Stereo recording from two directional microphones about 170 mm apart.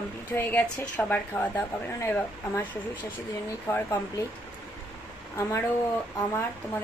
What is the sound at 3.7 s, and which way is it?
Speech, 20° left (ahead or behind).